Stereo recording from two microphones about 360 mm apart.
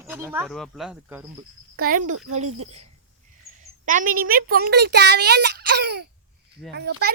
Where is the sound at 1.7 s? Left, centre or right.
Right.